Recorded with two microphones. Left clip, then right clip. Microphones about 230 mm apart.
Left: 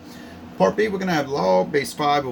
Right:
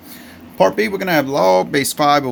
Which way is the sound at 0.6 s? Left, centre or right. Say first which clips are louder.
Right 4 dB; right.